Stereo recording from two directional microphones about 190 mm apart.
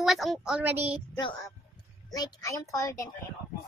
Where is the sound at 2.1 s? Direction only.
20° left (ahead or behind).